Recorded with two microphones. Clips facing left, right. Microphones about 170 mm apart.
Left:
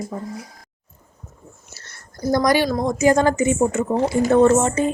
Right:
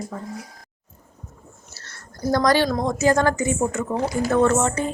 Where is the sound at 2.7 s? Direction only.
5° left (ahead or behind).